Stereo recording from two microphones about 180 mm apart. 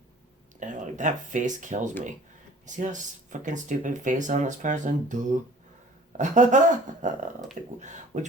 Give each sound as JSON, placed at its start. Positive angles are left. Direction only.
{"t": 0.6, "sound": "speech", "side_deg": -45}